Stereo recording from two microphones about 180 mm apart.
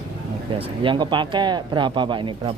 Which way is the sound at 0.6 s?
30° right (ahead or behind).